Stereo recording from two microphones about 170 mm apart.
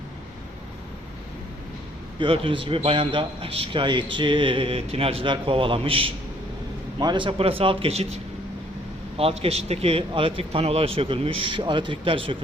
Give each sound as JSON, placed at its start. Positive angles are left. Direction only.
{"t": 2.1, "sound": "a man's voice", "side_deg": -30}